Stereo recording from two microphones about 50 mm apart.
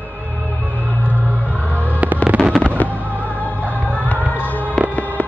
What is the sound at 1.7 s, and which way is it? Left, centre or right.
Fireworks, left.